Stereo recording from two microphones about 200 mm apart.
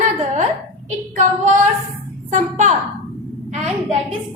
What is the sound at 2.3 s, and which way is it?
A woman's voice, 40° right (ahead or behind).